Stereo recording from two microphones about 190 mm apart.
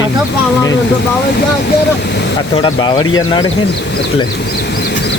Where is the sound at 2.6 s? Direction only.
25° left (ahead or behind).